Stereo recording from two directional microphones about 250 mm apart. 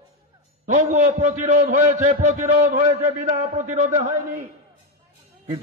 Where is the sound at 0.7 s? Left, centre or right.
Right.